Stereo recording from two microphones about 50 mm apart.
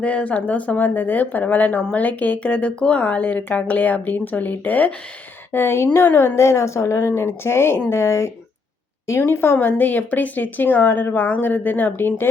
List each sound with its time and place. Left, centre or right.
0.0 s speech: left
5.5 s a woman's voice: left